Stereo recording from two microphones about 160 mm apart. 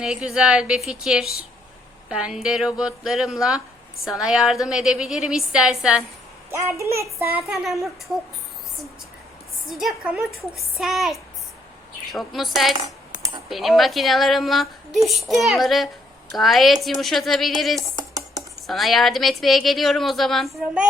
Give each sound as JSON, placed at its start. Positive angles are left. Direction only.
{"t": 0.0, "sound": "speech", "side_deg": -5}
{"t": 6.5, "sound": "a child's voice", "side_deg": -15}
{"t": 7.3, "sound": "speech", "side_deg": 0}
{"t": 9.6, "sound": "speech", "side_deg": 0}
{"t": 12.8, "sound": "cutlery", "side_deg": -25}
{"t": 13.5, "sound": "speech", "side_deg": 0}